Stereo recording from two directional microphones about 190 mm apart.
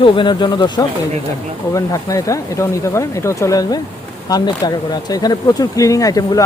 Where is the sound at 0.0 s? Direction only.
25° left (ahead or behind).